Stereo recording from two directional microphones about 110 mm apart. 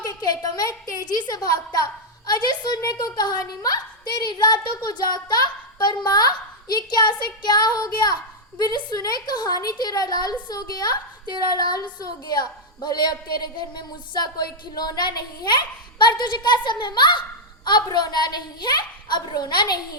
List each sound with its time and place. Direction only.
0.0 s a woman's voice: 35° left (ahead or behind)